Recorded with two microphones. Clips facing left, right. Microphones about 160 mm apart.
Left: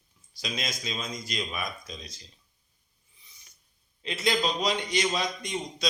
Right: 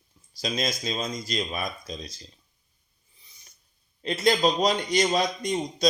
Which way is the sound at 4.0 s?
40° right (ahead or behind).